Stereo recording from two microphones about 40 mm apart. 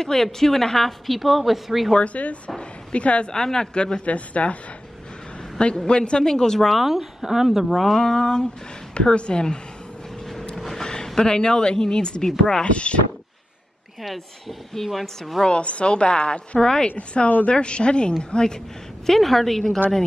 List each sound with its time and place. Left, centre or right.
0.0 s a woman's voice: centre
2.0 s speech: left
3.3 s speech: centre
4.1 s speech: left
5.9 s speech: left
6.7 s a woman's voice: centre; by 9.6 s left
10.5 s a sound: centre
10.8 s a sound: centre
11.1 s speech: centre
14.9 s a woman's voice: centre
15.4 s speech: left
19.0 s a woman's voice: centre